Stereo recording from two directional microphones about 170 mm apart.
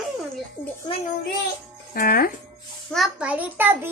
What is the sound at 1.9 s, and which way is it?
Speech, 60° left (ahead or behind).